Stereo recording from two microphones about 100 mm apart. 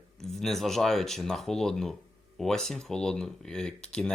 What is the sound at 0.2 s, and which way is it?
Speech, 5° left (ahead or behind).